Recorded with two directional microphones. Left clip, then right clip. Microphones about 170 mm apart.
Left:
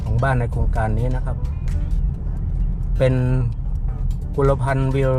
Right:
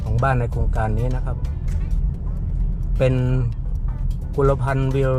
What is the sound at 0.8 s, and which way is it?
Speech, centre (ahead or behind).